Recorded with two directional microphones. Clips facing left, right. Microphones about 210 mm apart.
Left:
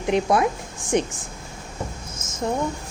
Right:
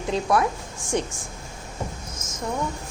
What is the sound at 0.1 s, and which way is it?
Speech, 25° left (ahead or behind).